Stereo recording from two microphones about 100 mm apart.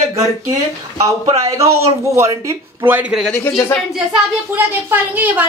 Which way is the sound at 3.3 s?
20° left (ahead or behind).